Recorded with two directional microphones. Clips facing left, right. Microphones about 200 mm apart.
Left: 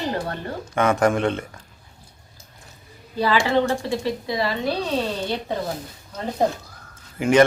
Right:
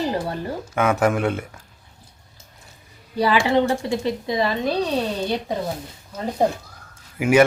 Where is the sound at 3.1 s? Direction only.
15° right (ahead or behind).